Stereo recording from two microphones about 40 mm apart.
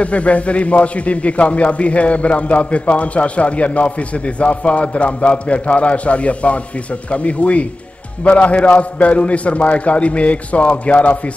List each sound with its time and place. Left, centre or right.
0.0 s a man's voice: left